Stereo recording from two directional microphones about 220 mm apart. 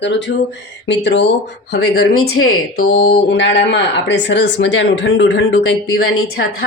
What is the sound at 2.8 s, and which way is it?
Speech, 40° left (ahead or behind).